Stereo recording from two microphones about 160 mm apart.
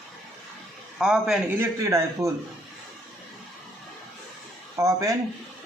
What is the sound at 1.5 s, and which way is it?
Speech, 15° right (ahead or behind).